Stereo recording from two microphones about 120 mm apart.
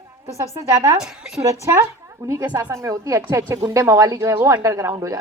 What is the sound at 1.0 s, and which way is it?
Speech, 5° right (ahead or behind).